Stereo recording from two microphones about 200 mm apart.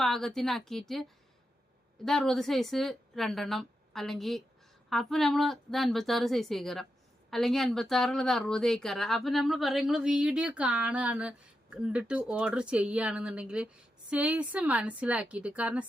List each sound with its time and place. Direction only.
0.0 s a woman's voice: centre (ahead or behind)
2.0 s a woman's voice: centre (ahead or behind)